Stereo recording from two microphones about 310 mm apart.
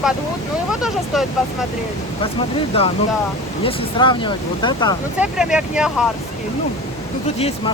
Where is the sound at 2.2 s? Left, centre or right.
Centre.